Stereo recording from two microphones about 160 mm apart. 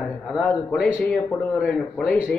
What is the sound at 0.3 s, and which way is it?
Speech, centre (ahead or behind).